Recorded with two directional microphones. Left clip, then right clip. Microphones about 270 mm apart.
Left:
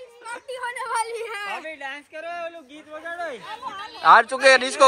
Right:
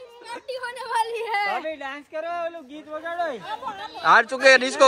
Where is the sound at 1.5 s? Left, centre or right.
Right.